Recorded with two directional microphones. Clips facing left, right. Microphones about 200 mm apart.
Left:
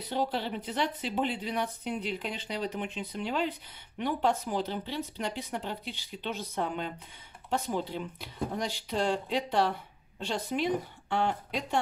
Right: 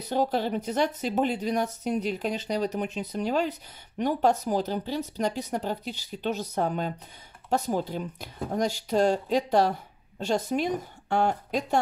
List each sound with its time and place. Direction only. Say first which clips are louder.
0.0 s speech: right 5 dB; 45° right (ahead or behind)